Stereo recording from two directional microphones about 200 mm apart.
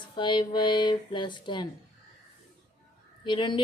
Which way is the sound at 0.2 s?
25° left (ahead or behind).